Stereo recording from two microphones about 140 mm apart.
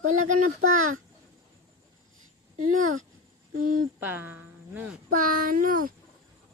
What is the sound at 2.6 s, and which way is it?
Speech, 70° right (ahead or behind).